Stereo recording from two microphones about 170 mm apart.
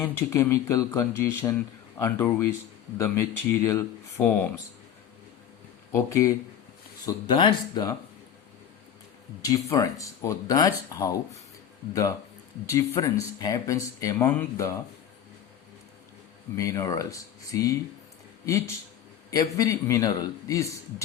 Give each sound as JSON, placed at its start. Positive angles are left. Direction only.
{"t": 0.0, "sound": "speech", "side_deg": 15}
{"t": 5.9, "sound": "speech", "side_deg": 15}
{"t": 9.4, "sound": "speech", "side_deg": 20}
{"t": 12.6, "sound": "speech", "side_deg": 20}
{"t": 16.6, "sound": "speech", "side_deg": 20}